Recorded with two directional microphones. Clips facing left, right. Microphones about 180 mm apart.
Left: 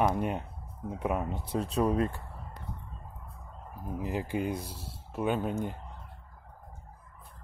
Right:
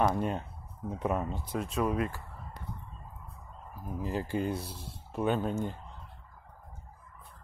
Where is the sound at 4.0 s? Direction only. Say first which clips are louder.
Even; 15° left (ahead or behind).